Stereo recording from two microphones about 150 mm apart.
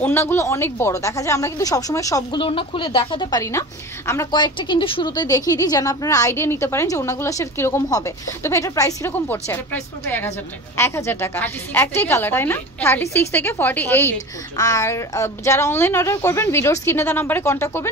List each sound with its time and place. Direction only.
0.0 s a woman's voice: 15° left (ahead or behind)
2.4 s a woman's voice: 35° left (ahead or behind); by 4.3 s 20° left (ahead or behind)
4.3 s a woman's voice: 30° left (ahead or behind)